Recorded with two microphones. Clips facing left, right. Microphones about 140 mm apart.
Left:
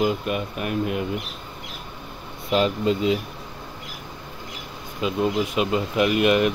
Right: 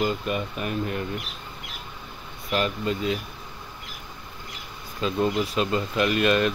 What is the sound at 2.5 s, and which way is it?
Speech, 20° left (ahead or behind).